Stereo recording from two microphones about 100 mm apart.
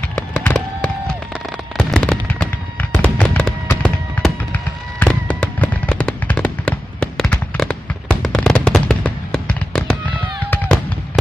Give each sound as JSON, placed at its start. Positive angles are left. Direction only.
{"t": 0.1, "sound": "fireworks", "side_deg": 20}